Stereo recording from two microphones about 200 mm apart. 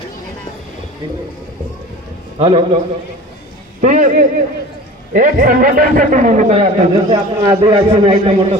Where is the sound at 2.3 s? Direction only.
30° right (ahead or behind).